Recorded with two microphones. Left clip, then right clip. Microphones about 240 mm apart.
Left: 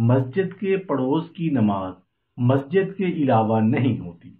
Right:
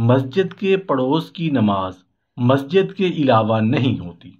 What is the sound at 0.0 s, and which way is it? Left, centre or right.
Speech, right.